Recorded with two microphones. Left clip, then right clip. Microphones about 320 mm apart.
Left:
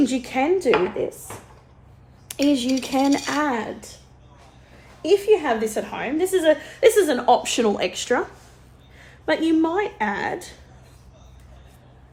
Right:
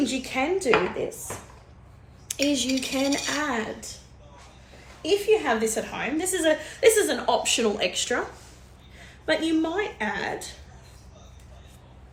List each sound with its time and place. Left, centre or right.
0.0 s a woman's voice: left
2.2 s a woman's voice: left
5.0 s a woman's voice: left
9.2 s a woman's voice: left